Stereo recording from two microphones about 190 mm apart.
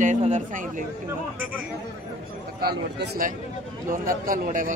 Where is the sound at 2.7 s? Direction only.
50° right (ahead or behind).